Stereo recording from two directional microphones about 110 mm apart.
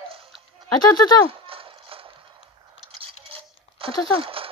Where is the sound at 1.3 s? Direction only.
55° right (ahead or behind).